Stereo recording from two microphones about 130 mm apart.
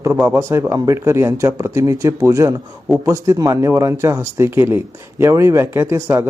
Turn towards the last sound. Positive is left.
turn(degrees=-20)  # may be behind; listen again after turning